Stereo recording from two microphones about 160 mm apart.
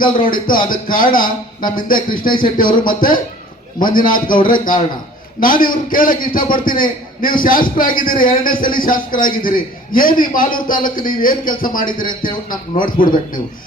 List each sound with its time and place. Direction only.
0.0 s a man's voice: 60° left (ahead or behind)
5.4 s a man's voice: 60° left (ahead or behind)